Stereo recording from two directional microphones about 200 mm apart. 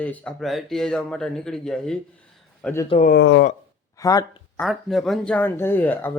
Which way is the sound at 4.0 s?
15° left (ahead or behind).